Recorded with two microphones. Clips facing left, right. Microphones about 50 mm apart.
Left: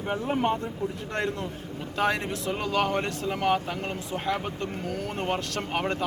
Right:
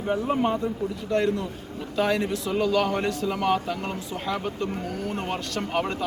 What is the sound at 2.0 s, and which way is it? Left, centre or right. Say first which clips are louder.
Speech: right 3 dB; left.